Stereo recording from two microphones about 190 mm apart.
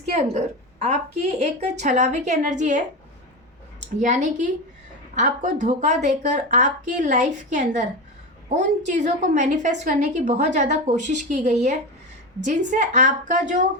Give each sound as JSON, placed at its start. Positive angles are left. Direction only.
{"t": 0.2, "sound": "a woman's voice", "side_deg": -35}